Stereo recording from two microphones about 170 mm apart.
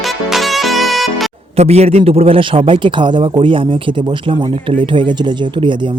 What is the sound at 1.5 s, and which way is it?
Speech, 40° right (ahead or behind).